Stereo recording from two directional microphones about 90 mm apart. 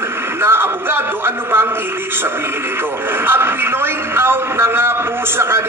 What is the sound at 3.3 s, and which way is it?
A man's voice, 25° right (ahead or behind).